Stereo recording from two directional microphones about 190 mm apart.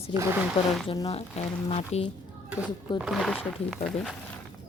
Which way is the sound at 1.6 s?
30° left (ahead or behind).